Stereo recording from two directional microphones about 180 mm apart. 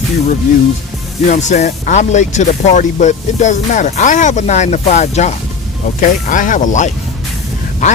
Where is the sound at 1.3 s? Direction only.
40° left (ahead or behind).